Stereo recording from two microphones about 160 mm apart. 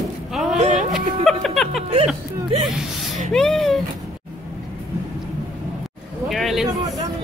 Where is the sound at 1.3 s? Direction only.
Centre (ahead or behind).